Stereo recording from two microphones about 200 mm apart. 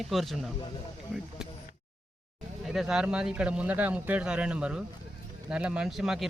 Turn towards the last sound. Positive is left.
turn(degrees=0)  # may be behind; listen again after turning